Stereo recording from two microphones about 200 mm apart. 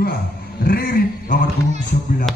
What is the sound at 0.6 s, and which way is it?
Speech, 50° left (ahead or behind).